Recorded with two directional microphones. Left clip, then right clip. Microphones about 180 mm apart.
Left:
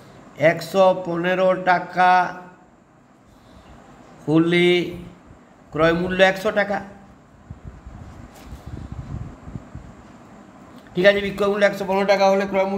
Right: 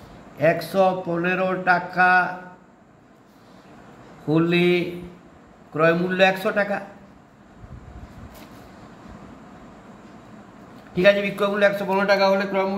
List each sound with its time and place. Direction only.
0.4 s a man's voice: 20° left (ahead or behind)
4.4 s a man's voice: 20° left (ahead or behind)
5.9 s a man's voice: 20° left (ahead or behind)
11.0 s a man's voice: 15° left (ahead or behind)